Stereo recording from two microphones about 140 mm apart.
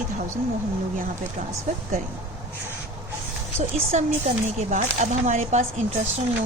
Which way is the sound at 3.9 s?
55° right (ahead or behind).